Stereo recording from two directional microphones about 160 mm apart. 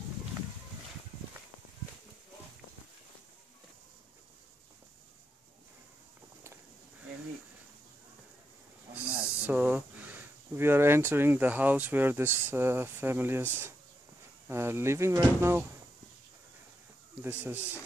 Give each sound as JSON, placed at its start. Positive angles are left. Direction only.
{"t": 8.9, "sound": "speech", "side_deg": -10}
{"t": 14.5, "sound": "speech", "side_deg": -15}
{"t": 17.2, "sound": "speech", "side_deg": -10}